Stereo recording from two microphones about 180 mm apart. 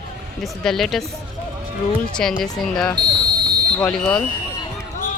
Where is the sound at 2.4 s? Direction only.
5° left (ahead or behind).